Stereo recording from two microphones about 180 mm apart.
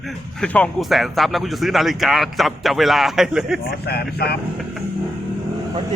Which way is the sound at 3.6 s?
60° left (ahead or behind).